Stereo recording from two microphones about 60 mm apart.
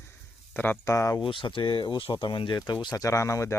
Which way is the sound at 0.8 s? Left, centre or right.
Left.